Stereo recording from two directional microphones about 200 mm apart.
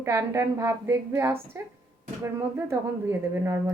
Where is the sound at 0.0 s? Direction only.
15° right (ahead or behind).